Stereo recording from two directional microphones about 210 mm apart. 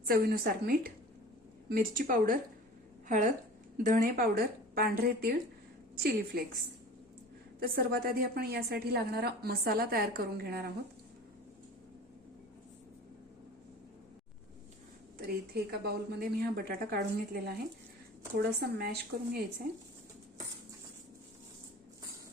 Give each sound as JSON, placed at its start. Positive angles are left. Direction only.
{"t": 0.1, "sound": "a woman's voice", "side_deg": -45}
{"t": 7.6, "sound": "a woman's voice", "side_deg": -45}
{"t": 15.3, "sound": "a woman's voice", "side_deg": -50}
{"t": 18.4, "sound": "a woman's voice", "side_deg": -50}